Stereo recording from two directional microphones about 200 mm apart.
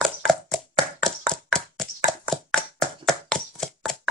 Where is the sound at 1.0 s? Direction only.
5° left (ahead or behind).